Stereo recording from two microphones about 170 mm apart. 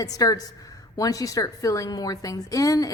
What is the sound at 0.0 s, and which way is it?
A woman's voice, 20° left (ahead or behind).